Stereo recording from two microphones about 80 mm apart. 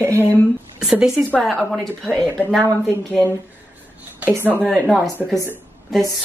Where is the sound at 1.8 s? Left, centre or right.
Centre.